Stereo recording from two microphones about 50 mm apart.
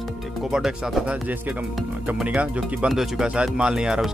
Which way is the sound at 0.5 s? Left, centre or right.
Centre.